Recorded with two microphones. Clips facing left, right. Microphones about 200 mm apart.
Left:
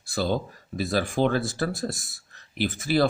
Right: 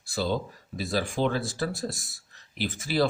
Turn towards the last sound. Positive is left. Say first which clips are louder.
# left 3 dB
turn(degrees=55)  # may be behind; listen again after turning